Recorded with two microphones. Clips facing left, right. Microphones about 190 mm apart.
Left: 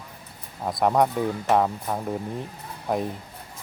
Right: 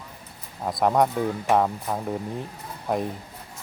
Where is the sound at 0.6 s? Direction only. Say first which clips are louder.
Even; centre (ahead or behind).